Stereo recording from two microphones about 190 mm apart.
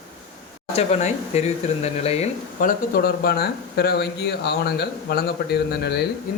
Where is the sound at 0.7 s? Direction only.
35° left (ahead or behind).